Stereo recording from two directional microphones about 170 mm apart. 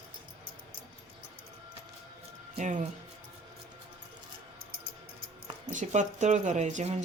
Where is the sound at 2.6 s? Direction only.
45° right (ahead or behind).